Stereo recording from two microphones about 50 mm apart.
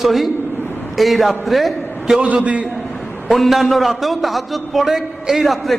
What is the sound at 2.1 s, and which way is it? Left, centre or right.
Speech, right.